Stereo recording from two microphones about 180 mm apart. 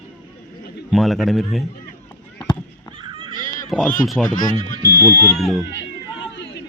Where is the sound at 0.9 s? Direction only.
Centre (ahead or behind).